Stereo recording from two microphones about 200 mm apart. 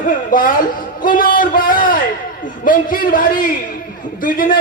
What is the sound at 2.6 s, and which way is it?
A man's voice, 45° left (ahead or behind).